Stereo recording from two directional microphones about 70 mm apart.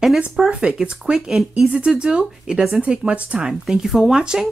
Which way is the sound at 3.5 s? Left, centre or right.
Centre.